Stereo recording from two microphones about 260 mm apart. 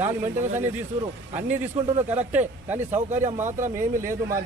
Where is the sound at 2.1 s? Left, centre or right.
Centre.